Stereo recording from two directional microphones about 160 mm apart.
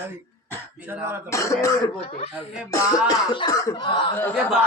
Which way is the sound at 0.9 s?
15° right (ahead or behind).